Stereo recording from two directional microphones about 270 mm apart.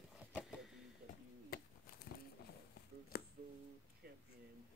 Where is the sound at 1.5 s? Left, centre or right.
Left.